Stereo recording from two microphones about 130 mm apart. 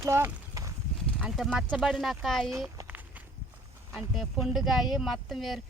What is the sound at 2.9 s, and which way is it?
Walk, 15° right (ahead or behind).